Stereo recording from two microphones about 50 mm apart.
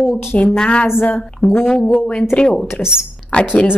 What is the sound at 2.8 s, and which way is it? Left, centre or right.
Speech, centre.